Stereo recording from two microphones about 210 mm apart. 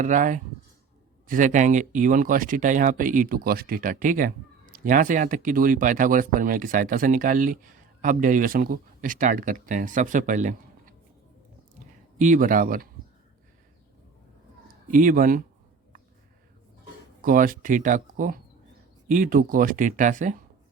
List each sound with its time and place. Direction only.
0.0 s speech: 40° right (ahead or behind)
12.2 s speech: 40° right (ahead or behind)
14.8 s speech: 40° right (ahead or behind)
17.2 s speech: 40° right (ahead or behind)